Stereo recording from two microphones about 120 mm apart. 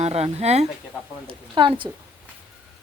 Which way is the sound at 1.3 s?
40° right (ahead or behind).